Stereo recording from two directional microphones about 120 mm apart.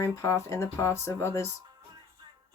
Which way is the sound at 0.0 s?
25° left (ahead or behind).